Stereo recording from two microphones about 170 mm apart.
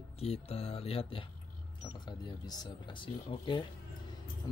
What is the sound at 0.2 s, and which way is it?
Speech, 35° left (ahead or behind).